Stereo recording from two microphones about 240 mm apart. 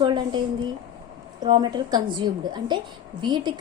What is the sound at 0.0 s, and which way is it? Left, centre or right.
A woman's voice, centre.